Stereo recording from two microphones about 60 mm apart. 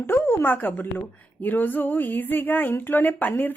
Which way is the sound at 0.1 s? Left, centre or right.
Left.